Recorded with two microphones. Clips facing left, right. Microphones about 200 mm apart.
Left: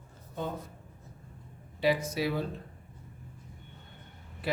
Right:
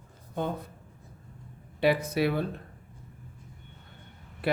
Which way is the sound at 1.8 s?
60° right (ahead or behind).